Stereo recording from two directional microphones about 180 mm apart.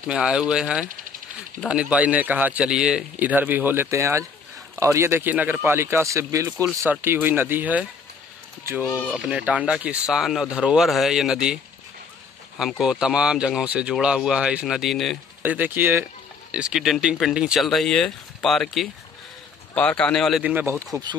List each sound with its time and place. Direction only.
0.0 s a man's voice: 5° right (ahead or behind)
8.8 s speech: 15° left (ahead or behind)
9.1 s a man's voice: 5° right (ahead or behind)